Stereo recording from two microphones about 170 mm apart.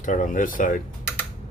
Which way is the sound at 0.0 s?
50° left (ahead or behind).